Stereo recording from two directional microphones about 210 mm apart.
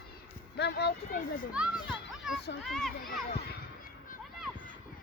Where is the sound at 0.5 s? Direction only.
55° left (ahead or behind).